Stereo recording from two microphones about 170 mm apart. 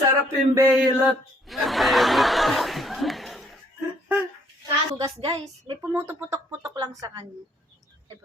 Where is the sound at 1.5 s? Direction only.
Centre (ahead or behind).